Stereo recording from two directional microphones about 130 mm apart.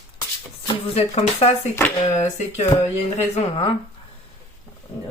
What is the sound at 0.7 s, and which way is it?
Speech, 50° left (ahead or behind).